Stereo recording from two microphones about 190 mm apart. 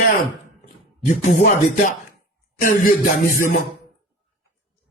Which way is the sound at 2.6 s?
50° left (ahead or behind).